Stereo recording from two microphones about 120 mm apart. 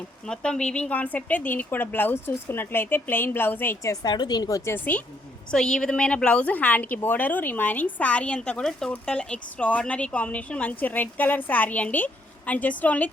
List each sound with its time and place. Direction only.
0.3 s a woman's voice: 5° left (ahead or behind)
4.0 s a woman's voice: 35° left (ahead or behind); by 13.1 s 10° left (ahead or behind)